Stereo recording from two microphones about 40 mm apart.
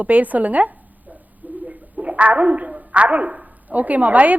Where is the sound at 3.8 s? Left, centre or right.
Right.